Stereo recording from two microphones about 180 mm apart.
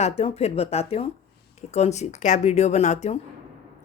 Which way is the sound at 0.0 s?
35° left (ahead or behind).